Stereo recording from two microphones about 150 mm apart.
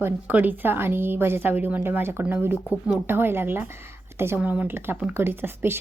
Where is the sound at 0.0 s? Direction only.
10° right (ahead or behind).